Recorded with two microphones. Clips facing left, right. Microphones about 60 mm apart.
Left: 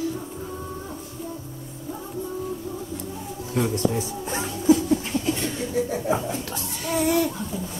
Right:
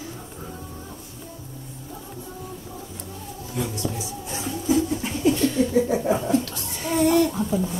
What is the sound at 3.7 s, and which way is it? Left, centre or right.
Speech, left.